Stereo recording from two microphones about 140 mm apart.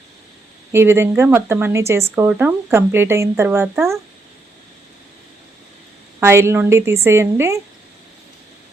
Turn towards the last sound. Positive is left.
turn(degrees=-20)  # may be behind; listen again after turning